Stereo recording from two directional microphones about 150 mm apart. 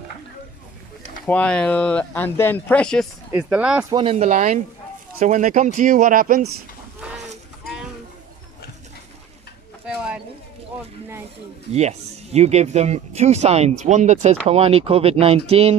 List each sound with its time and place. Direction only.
1.2 s speech: 10° left (ahead or behind)
3.3 s speech: 10° right (ahead or behind)
3.9 s speech: 35° right (ahead or behind)
4.2 s speech: 55° right (ahead or behind)
7.0 s a sound: 5° right (ahead or behind)
9.8 s a sound: 5° right (ahead or behind)
11.7 s speech: 45° right (ahead or behind)